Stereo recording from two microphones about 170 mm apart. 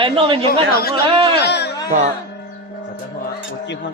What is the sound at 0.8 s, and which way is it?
Speech, 65° left (ahead or behind).